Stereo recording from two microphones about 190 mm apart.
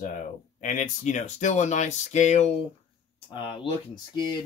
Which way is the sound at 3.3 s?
25° left (ahead or behind).